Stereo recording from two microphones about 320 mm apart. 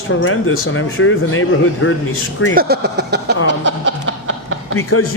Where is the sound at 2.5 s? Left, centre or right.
Right.